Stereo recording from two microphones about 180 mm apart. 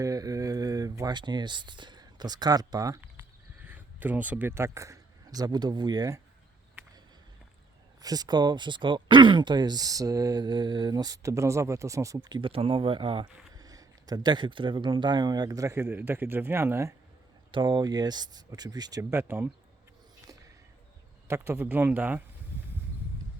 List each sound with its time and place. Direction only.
0.0 s a man's voice: 20° right (ahead or behind)
8.0 s speech: 20° right (ahead or behind)
17.5 s speech: 25° right (ahead or behind)
21.2 s speech: 15° right (ahead or behind)